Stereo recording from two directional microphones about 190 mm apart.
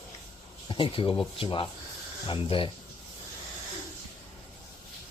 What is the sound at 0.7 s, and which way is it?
Speech, 25° left (ahead or behind).